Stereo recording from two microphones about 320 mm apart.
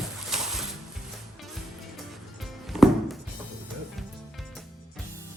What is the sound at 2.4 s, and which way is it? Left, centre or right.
Music, centre.